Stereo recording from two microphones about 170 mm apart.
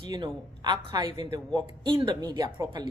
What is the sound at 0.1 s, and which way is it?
A woman's voice, 25° right (ahead or behind).